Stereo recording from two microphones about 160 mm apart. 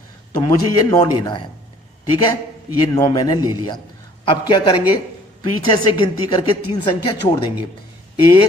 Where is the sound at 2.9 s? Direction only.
25° left (ahead or behind).